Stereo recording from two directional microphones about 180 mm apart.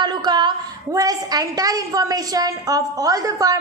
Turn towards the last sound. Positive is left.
turn(degrees=-20)  # may be behind; listen again after turning